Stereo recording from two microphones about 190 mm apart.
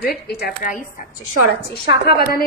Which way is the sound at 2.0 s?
55° left (ahead or behind).